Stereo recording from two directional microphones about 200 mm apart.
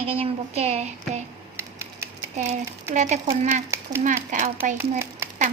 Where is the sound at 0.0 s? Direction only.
30° right (ahead or behind).